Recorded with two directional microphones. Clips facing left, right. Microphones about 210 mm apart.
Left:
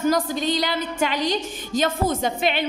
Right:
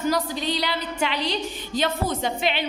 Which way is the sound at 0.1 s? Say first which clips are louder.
Left 3 dB; 45° left (ahead or behind).